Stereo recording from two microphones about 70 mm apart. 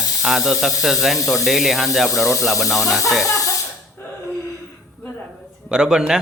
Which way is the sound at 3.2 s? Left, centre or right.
Left.